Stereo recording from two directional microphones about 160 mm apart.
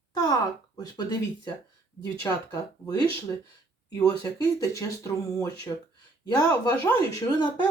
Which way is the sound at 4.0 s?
25° left (ahead or behind).